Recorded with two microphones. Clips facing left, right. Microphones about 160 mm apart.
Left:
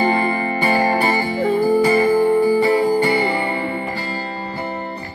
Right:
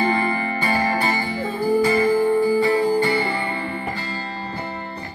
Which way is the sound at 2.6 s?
15° left (ahead or behind).